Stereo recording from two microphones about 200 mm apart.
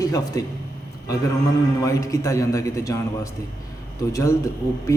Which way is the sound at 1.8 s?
15° left (ahead or behind).